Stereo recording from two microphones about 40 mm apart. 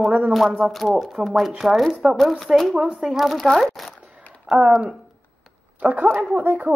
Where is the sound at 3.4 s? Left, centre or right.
Centre.